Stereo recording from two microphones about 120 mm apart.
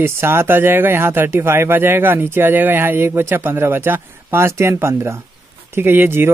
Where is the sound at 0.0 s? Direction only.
20° right (ahead or behind).